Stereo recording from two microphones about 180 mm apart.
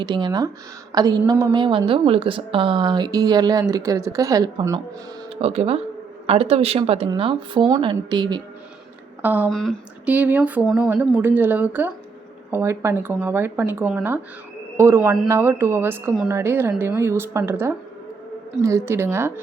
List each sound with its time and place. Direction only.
0.0 s a woman's voice: 25° right (ahead or behind)
5.3 s a woman's voice: 35° right (ahead or behind)
9.2 s speech: 10° right (ahead or behind)
9.5 s speech: centre (ahead or behind)
10.1 s speech: 10° right (ahead or behind)